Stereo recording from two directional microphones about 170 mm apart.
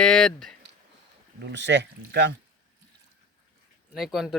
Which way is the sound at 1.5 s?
90° right.